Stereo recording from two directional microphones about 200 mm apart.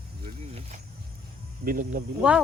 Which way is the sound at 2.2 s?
5° right (ahead or behind).